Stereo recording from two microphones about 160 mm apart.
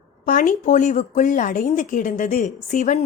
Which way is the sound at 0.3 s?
55° left (ahead or behind).